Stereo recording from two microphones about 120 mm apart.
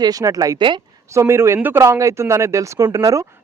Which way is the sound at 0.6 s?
40° right (ahead or behind).